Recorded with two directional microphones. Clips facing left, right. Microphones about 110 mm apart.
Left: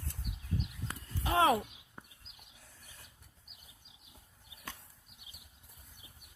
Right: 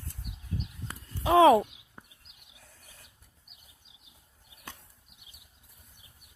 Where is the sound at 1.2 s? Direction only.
90° right.